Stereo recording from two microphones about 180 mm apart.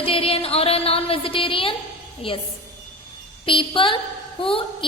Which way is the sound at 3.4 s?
30° left (ahead or behind).